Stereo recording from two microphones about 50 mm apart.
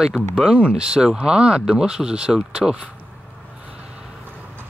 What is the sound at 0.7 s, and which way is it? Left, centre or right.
Speech, centre.